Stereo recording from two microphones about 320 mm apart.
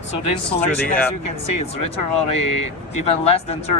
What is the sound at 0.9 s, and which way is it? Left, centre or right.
Speech, centre.